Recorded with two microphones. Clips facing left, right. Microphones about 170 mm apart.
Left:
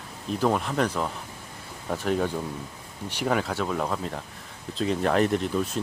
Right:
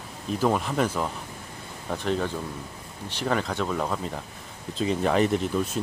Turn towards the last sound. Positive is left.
turn(degrees=0)  # may be behind; listen again after turning